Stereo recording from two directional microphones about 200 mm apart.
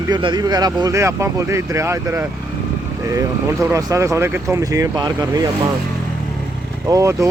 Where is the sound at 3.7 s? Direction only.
15° right (ahead or behind).